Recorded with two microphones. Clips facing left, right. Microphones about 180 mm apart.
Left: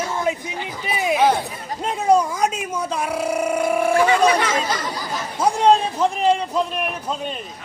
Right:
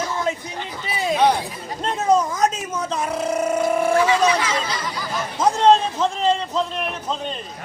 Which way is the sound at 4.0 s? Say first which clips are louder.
Left 1 dB; 55° left (ahead or behind).